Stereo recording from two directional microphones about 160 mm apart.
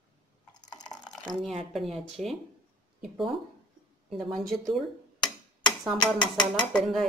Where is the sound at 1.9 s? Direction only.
Centre (ahead or behind).